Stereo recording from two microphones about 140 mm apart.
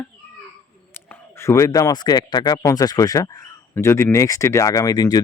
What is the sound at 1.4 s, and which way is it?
Speech, 20° left (ahead or behind).